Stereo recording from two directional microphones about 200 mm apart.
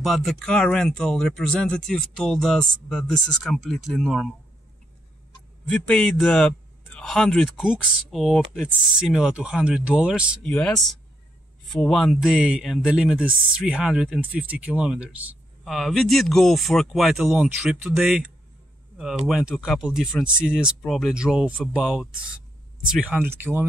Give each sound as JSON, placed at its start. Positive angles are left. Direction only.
{"t": 0.0, "sound": "speech", "side_deg": 0}
{"t": 5.7, "sound": "speech", "side_deg": 5}
{"t": 10.4, "sound": "speech", "side_deg": 5}
{"t": 11.7, "sound": "speech", "side_deg": 0}